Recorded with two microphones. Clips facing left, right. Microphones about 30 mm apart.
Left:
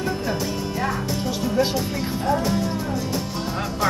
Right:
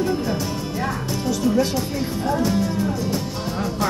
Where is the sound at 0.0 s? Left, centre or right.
Centre.